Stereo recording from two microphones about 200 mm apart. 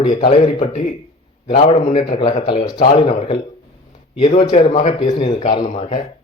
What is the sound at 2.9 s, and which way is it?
A man's voice, 30° left (ahead or behind).